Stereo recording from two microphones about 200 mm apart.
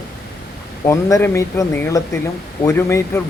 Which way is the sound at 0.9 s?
15° left (ahead or behind).